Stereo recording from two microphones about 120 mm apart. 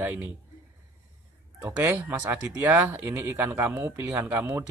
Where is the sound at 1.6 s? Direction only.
20° right (ahead or behind).